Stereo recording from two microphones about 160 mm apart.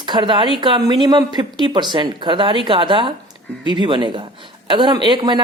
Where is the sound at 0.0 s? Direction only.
30° right (ahead or behind).